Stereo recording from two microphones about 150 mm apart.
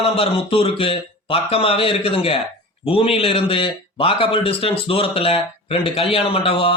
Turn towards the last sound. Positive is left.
turn(degrees=40)  # may be behind; listen again after turning